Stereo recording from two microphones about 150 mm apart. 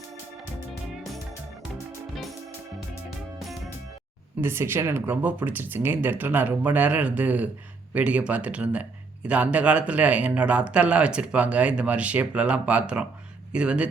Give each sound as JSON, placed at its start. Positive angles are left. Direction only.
{"t": 3.3, "sound": "music", "side_deg": 0}
{"t": 4.4, "sound": "speech", "side_deg": -15}